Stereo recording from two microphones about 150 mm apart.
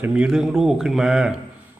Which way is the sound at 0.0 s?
5° right (ahead or behind).